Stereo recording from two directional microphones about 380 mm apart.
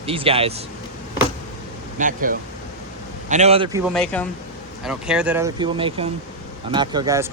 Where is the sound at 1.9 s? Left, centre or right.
Right.